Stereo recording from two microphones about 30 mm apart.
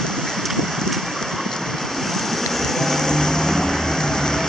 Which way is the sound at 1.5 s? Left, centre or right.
Centre.